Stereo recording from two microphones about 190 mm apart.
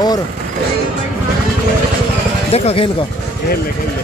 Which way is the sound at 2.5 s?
30° left (ahead or behind).